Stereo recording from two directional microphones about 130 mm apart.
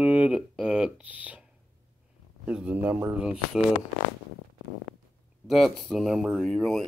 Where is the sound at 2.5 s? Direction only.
10° right (ahead or behind).